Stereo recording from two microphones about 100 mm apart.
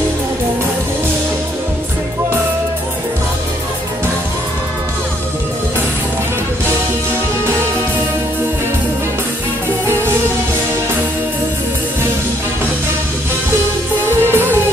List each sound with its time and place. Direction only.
9.8 s music: 25° right (ahead or behind)
14.2 s music: 25° right (ahead or behind)